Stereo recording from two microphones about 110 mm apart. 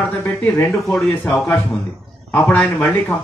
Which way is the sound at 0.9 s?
Centre (ahead or behind).